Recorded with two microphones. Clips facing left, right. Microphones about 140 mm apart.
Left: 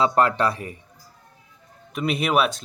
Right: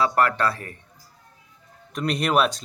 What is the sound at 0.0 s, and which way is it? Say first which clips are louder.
Speech: left 2 dB; 20° left (ahead or behind).